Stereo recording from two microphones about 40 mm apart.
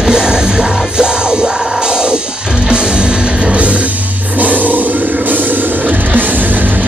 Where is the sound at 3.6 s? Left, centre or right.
Right.